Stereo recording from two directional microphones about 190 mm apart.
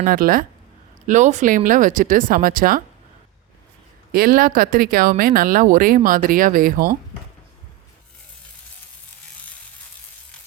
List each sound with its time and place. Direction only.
0.0 s speech: 50° right (ahead or behind)
4.1 s speech: 50° right (ahead or behind)